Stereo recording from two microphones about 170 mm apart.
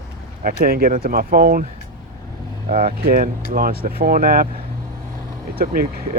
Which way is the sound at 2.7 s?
55° right (ahead or behind).